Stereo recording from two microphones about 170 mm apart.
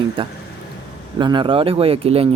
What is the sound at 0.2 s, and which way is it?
Speech, 30° right (ahead or behind).